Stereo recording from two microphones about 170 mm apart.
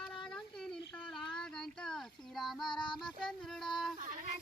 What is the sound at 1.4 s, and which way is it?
Child singing, 5° left (ahead or behind).